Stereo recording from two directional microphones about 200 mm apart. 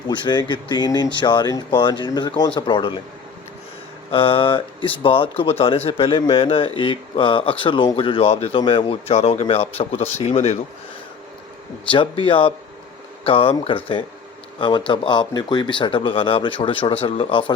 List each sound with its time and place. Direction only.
0.1 s speech: 20° left (ahead or behind)
4.1 s speech: 25° left (ahead or behind)
11.9 s speech: 25° left (ahead or behind)